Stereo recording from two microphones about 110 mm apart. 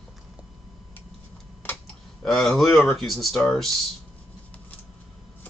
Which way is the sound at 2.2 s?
Centre (ahead or behind).